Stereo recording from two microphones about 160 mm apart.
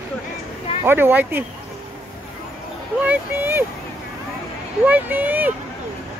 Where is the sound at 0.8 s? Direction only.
15° right (ahead or behind).